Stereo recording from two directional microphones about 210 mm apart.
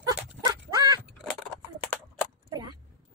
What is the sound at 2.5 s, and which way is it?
Chop, 20° right (ahead or behind).